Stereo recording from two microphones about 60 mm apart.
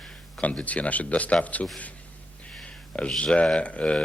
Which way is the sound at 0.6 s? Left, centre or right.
Left.